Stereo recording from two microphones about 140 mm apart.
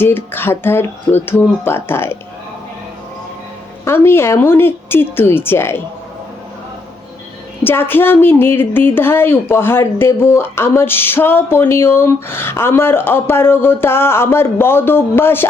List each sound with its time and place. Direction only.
0.0 s a woman's voice: 15° left (ahead or behind)
3.8 s a woman's voice: 15° left (ahead or behind)
7.6 s a woman's voice: 15° left (ahead or behind)